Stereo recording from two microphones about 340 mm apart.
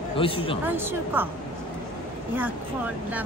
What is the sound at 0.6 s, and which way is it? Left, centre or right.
Speech, centre.